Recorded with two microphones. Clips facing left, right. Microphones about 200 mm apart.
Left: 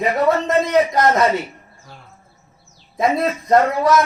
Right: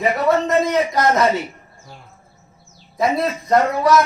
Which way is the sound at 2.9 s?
20° left (ahead or behind).